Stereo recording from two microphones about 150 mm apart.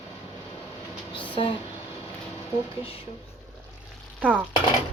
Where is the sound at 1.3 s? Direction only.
35° left (ahead or behind).